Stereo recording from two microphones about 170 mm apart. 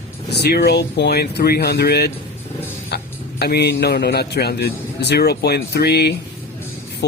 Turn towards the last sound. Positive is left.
turn(degrees=70)  # may be behind; listen again after turning